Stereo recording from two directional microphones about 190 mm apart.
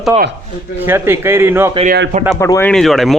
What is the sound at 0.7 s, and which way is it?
Speech, 10° right (ahead or behind).